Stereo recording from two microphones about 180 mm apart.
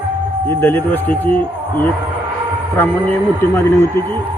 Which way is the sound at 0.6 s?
10° left (ahead or behind).